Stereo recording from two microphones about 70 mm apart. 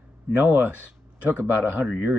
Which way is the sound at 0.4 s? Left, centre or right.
Right.